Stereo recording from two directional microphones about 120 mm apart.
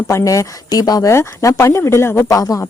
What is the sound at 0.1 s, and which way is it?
A woman's voice, 25° left (ahead or behind).